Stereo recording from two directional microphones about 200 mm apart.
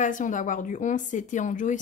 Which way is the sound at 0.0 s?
40° left (ahead or behind).